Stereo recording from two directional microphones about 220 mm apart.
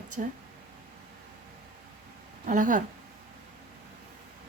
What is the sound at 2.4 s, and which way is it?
Speech, 35° right (ahead or behind).